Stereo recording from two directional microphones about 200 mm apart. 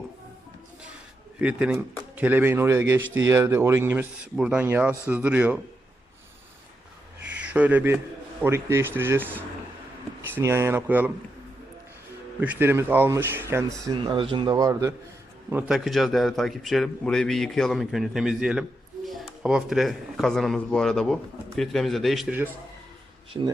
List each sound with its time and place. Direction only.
1.4 s speech: 5° right (ahead or behind)
7.4 s speech: 5° right (ahead or behind)
12.4 s speech: 10° right (ahead or behind)
23.3 s speech: 15° right (ahead or behind)